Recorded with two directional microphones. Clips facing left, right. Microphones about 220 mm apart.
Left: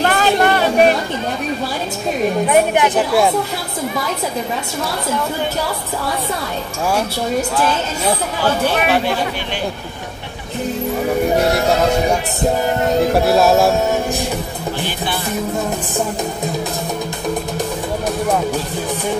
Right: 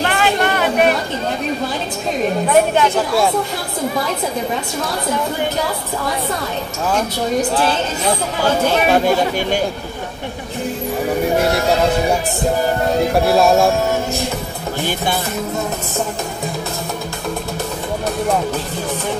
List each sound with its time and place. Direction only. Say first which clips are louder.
0.0 s chatter: left 2 dB; 40° left (ahead or behind)
2.5 s speech: right 1 dB; 15° left (ahead or behind)
8.8 s speech: right 3 dB; 45° right (ahead or behind)
13.3 s speech: right 1 dB; centre (ahead or behind)